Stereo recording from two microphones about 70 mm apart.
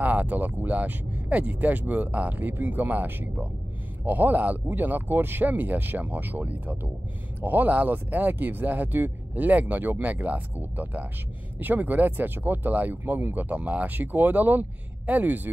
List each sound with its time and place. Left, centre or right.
0.0 s speech: right